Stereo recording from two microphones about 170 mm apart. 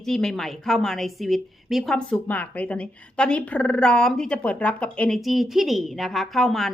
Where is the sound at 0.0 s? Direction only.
Centre (ahead or behind).